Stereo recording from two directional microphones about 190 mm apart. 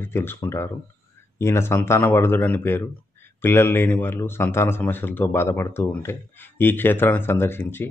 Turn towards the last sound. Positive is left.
turn(degrees=10)  # may be behind; listen again after turning